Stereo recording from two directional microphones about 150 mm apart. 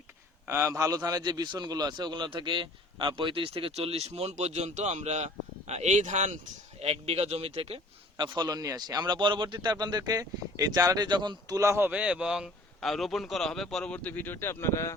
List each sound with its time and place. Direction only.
0.4 s a man's voice: 20° right (ahead or behind); by 7.8 s 40° right (ahead or behind)
8.1 s a man's voice: 30° right (ahead or behind); by 14.9 s 20° left (ahead or behind)